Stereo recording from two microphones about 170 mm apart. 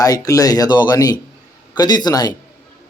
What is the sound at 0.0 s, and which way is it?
Speech, 20° left (ahead or behind).